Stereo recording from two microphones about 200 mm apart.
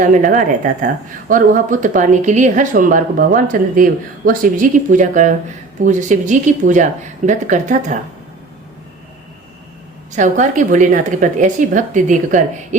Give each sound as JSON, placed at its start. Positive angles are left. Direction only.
{"t": 0.0, "sound": "speech", "side_deg": -40}
{"t": 10.1, "sound": "speech", "side_deg": -40}